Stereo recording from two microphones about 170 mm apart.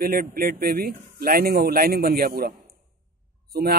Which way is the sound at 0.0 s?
60° right (ahead or behind).